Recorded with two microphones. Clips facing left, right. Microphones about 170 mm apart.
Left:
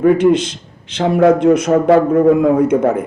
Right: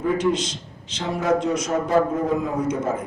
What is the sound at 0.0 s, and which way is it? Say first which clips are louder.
A man's voice: left 10 dB; 60° left (ahead or behind).